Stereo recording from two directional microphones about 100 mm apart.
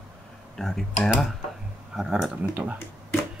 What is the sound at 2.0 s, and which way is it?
Speech, 5° right (ahead or behind).